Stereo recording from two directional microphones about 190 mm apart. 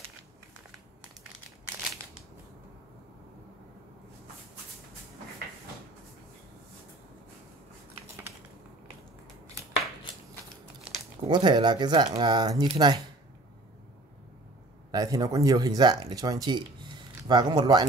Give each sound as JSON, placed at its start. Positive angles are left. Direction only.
{"t": 11.2, "sound": "speech", "side_deg": -25}
{"t": 14.9, "sound": "speech", "side_deg": -20}